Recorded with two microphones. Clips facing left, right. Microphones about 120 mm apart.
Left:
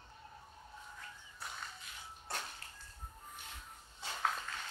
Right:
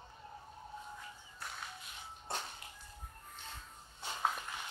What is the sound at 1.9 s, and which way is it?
Music, 20° right (ahead or behind).